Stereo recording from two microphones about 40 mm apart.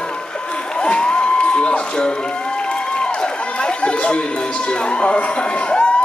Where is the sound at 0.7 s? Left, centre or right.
Left.